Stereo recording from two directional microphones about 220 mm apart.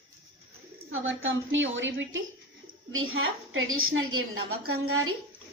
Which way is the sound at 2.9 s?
65° right (ahead or behind).